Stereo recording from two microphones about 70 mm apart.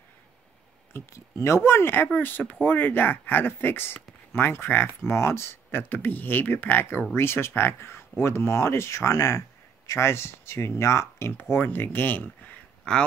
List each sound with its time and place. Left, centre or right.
1.1 s speech: left
12.9 s a man's voice: centre